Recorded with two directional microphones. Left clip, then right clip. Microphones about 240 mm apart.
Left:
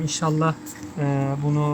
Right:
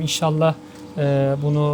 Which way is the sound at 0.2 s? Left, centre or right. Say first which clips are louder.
Right 4 dB; right.